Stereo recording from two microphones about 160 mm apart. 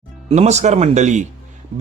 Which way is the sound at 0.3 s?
45° right (ahead or behind).